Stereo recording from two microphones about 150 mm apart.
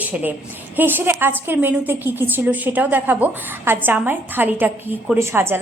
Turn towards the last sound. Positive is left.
turn(degrees=-15)  # may be behind; listen again after turning